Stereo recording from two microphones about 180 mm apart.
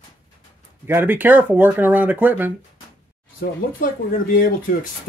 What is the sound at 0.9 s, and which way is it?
Speech, 10° right (ahead or behind).